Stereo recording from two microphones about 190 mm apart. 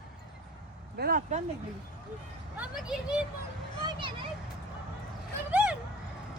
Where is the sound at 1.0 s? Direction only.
50° right (ahead or behind).